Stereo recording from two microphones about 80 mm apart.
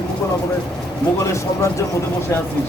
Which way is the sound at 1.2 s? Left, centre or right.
Left.